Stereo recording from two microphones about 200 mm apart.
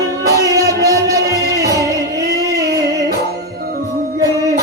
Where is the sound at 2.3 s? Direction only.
15° right (ahead or behind).